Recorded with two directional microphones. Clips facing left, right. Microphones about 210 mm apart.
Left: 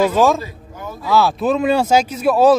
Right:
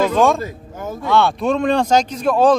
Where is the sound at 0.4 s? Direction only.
45° right (ahead or behind).